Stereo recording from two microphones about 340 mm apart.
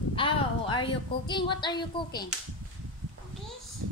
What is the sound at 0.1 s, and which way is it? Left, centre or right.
A woman's voice, centre.